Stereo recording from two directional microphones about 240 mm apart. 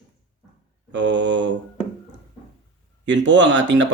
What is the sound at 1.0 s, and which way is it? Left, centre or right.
Speech, right.